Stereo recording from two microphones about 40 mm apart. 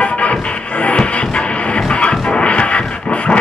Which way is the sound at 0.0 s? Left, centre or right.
Left.